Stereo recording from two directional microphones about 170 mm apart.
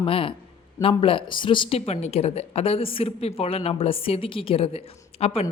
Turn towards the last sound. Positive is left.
turn(degrees=35)  # may be behind; listen again after turning